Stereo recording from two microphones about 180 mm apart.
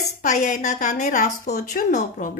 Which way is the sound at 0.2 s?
40° left (ahead or behind).